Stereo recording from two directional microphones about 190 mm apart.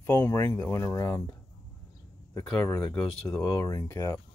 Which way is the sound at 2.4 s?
10° left (ahead or behind).